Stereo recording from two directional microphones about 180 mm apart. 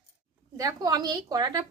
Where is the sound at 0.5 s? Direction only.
20° right (ahead or behind).